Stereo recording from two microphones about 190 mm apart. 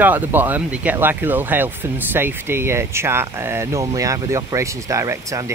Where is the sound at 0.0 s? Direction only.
10° right (ahead or behind).